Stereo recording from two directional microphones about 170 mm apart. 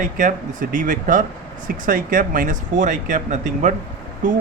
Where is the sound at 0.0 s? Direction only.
55° right (ahead or behind).